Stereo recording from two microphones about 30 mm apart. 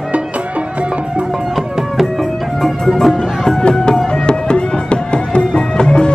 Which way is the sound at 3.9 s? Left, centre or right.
Left.